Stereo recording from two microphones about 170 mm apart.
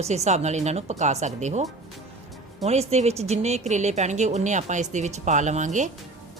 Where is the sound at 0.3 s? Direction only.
40° right (ahead or behind).